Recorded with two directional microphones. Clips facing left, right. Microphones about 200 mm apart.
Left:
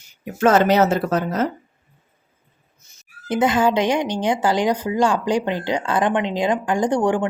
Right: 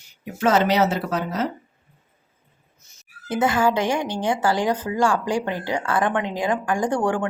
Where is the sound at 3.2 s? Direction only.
20° left (ahead or behind).